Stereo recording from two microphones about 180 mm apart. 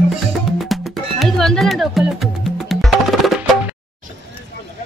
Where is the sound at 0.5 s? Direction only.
Centre (ahead or behind).